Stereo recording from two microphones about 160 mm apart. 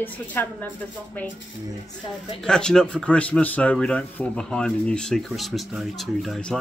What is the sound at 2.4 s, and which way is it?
Speech, 5° left (ahead or behind).